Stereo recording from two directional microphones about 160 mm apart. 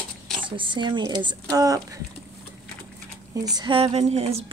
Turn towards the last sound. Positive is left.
turn(degrees=-40)  # may be behind; listen again after turning